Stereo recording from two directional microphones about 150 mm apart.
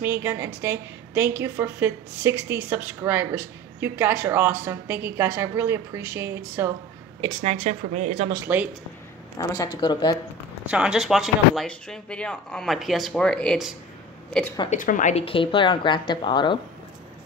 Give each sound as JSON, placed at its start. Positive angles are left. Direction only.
{"t": 0.0, "sound": "a woman's voice", "side_deg": -15}
{"t": 7.4, "sound": "a woman's voice", "side_deg": -50}
{"t": 8.5, "sound": "a woman's voice", "side_deg": -10}
{"t": 9.4, "sound": "speech", "side_deg": 25}
{"t": 10.7, "sound": "speech", "side_deg": -5}
{"t": 14.7, "sound": "speech", "side_deg": 60}
{"t": 15.2, "sound": "speech", "side_deg": 35}